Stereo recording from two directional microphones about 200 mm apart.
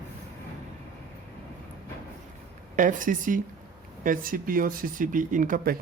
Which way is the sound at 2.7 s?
40° right (ahead or behind).